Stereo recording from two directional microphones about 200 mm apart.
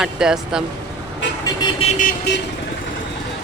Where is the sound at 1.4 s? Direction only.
20° left (ahead or behind).